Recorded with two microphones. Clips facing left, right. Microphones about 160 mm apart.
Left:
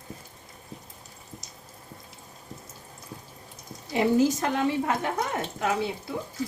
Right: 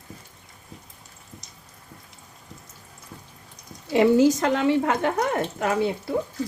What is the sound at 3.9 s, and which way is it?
Speech, 85° right.